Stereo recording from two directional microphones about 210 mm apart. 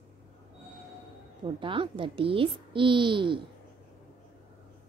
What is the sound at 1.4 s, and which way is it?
A child's voice, 25° right (ahead or behind).